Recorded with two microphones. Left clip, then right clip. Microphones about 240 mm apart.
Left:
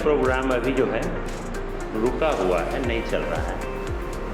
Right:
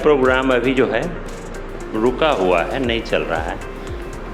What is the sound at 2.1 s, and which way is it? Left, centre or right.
Speech, right.